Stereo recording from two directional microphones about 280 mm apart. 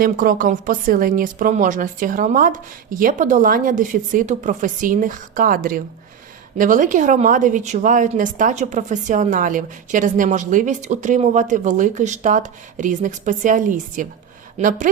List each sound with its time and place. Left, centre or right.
0.0 s a woman's voice: right